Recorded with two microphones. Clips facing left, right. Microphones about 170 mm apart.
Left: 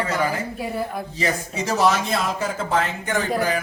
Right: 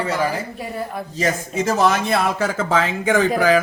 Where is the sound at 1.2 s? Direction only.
50° right (ahead or behind).